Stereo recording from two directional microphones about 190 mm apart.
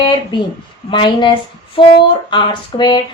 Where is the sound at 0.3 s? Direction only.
25° left (ahead or behind).